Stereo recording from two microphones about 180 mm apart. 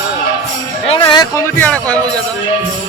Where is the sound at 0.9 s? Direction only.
25° left (ahead or behind).